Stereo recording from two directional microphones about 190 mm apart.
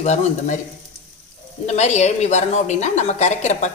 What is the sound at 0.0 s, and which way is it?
Speech, 35° left (ahead or behind).